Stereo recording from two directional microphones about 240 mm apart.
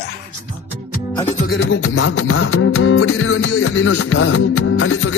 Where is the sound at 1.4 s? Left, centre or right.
Left.